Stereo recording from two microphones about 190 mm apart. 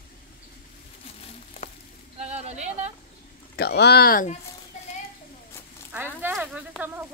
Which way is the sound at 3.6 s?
60° left (ahead or behind).